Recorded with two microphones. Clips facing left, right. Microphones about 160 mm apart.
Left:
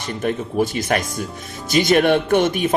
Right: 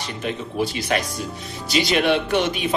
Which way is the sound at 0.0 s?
50° left (ahead or behind).